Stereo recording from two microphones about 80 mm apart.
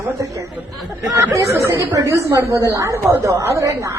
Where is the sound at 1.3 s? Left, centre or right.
Right.